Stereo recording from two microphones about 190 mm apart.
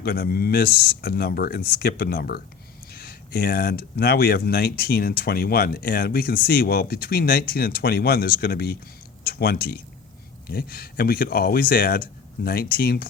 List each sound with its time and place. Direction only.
0.0 s speech: 55° left (ahead or behind)